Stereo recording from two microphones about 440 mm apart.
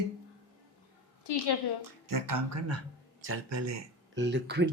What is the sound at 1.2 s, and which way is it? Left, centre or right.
Speech, left.